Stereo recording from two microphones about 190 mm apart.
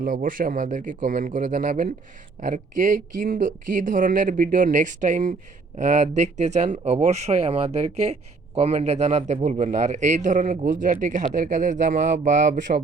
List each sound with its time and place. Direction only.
0.0 s speech: 45° right (ahead or behind)